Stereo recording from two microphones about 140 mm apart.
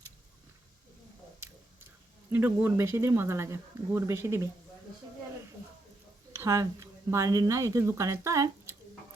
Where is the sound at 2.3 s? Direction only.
15° right (ahead or behind).